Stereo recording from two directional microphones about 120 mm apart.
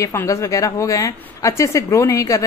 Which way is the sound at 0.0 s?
25° left (ahead or behind).